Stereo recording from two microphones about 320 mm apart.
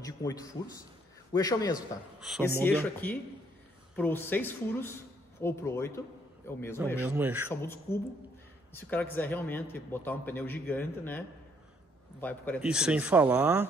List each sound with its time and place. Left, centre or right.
0.0 s a man's voice: centre
2.1 s a man's voice: centre
7.0 s speech: centre
7.4 s a man's voice: centre
9.1 s a man's voice: centre